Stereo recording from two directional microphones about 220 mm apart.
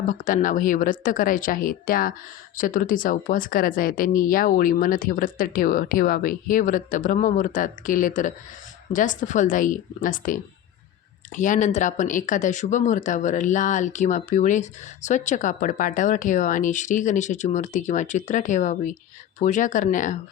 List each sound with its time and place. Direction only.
0.1 s speech: 35° left (ahead or behind)